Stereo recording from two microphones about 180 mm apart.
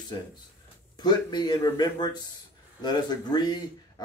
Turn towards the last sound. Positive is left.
turn(degrees=20)  # may be behind; listen again after turning